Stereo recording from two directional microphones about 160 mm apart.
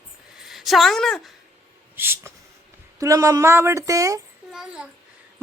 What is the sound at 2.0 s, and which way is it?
Speech, 15° right (ahead or behind).